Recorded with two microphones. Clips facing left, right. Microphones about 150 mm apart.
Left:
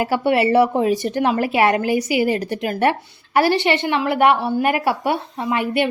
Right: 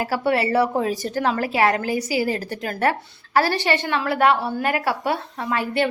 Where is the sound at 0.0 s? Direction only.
20° left (ahead or behind).